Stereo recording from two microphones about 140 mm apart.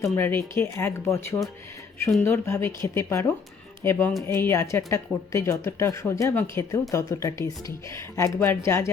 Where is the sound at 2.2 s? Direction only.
20° left (ahead or behind).